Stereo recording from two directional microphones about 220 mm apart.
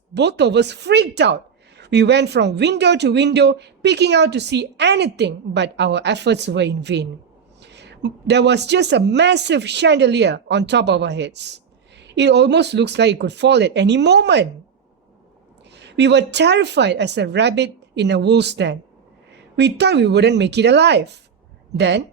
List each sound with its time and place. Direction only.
0.1 s speech: 50° right (ahead or behind)
15.7 s speech: 50° right (ahead or behind)